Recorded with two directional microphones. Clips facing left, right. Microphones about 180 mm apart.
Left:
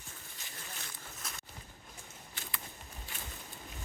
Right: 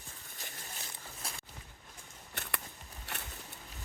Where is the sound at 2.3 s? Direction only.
65° right (ahead or behind).